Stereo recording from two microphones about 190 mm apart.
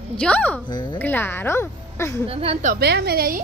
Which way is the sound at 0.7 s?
25° left (ahead or behind).